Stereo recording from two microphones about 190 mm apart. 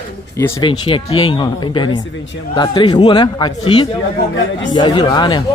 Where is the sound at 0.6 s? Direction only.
25° left (ahead or behind).